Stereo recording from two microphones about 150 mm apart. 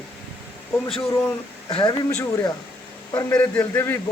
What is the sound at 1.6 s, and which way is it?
Speech, 30° left (ahead or behind).